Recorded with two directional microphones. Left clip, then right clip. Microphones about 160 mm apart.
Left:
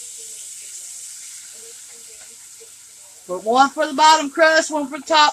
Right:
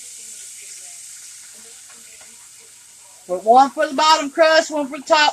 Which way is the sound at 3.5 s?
20° left (ahead or behind).